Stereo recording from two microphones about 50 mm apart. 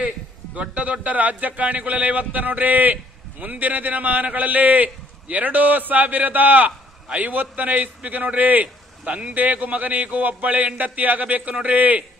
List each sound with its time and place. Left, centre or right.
0.5 s a man's voice: right